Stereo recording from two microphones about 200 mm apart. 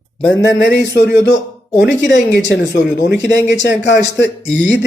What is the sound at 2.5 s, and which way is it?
Speech, 55° left (ahead or behind).